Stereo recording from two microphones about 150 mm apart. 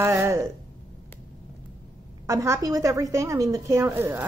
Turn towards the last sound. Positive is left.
turn(degrees=-15)  # may be behind; listen again after turning